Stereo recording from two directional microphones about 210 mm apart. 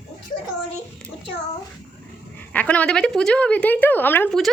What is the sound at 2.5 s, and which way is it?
A woman's voice, 5° left (ahead or behind).